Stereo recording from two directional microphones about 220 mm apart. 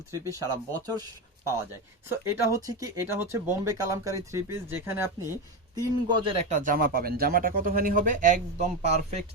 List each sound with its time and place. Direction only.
0.1 s speech: 15° right (ahead or behind)
2.0 s speech: 15° right (ahead or behind)
6.5 s speech: 35° right (ahead or behind)